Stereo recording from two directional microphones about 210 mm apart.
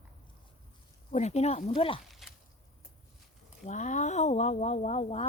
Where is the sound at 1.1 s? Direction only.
35° left (ahead or behind).